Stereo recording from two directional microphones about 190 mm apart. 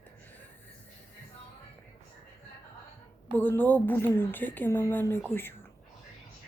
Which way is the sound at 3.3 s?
10° left (ahead or behind).